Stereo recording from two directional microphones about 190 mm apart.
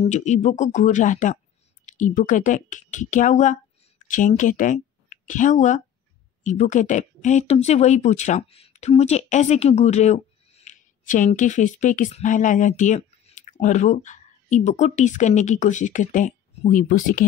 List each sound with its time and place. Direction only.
0.0 s a woman's voice: 40° left (ahead or behind)